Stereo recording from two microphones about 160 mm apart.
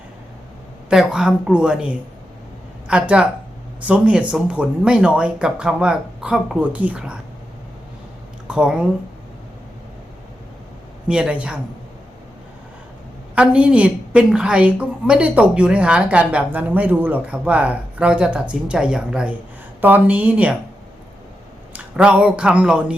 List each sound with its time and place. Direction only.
0.9 s a woman's voice: 5° right (ahead or behind)
8.4 s speech: 5° right (ahead or behind)
11.1 s speech: 5° right (ahead or behind)
13.3 s a woman's voice: 5° right (ahead or behind)
21.7 s speech: 5° right (ahead or behind)